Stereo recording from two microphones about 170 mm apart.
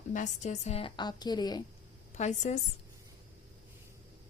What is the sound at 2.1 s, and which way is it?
Speech, 40° left (ahead or behind).